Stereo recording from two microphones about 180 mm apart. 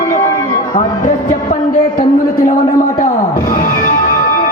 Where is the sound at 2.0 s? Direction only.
50° left (ahead or behind).